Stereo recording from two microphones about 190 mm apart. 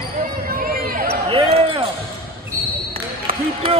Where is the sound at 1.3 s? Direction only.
30° right (ahead or behind).